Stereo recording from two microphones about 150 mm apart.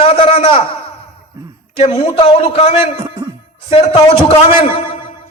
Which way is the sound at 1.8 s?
40° left (ahead or behind).